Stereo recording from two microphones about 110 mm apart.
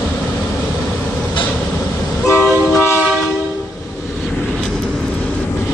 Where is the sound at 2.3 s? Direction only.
25° left (ahead or behind).